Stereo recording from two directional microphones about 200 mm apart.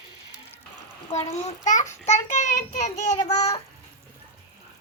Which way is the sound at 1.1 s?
35° left (ahead or behind).